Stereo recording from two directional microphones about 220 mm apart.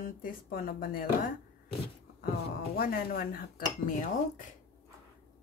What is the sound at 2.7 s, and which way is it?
Speech, 40° left (ahead or behind).